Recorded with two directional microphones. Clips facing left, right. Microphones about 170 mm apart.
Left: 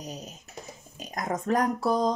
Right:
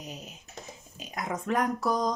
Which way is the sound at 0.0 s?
40° left (ahead or behind).